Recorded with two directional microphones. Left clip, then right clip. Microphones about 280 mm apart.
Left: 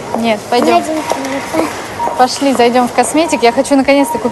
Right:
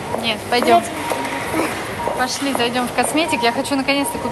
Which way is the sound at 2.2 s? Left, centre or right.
Centre.